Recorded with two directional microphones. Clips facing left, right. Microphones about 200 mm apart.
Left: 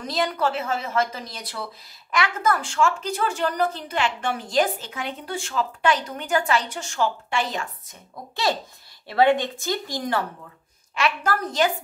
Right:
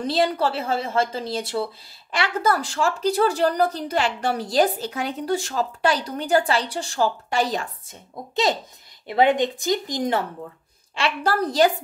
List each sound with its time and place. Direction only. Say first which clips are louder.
0.0 s a woman's voice: right 3 dB; 30° right (ahead or behind)
9.0 s speech: right 1 dB; 20° right (ahead or behind)
11.0 s a woman's voice: right 2 dB; 30° right (ahead or behind)